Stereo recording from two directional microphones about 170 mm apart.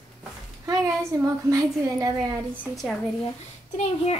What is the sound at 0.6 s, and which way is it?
A woman's voice, 20° right (ahead or behind).